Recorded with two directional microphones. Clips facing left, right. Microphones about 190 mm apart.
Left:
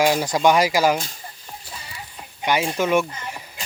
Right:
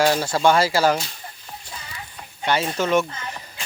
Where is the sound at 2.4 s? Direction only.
10° left (ahead or behind).